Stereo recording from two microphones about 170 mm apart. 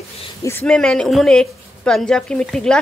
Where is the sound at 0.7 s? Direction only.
5° left (ahead or behind).